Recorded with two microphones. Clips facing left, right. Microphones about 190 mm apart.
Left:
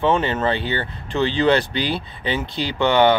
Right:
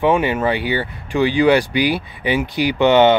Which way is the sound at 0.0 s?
15° right (ahead or behind).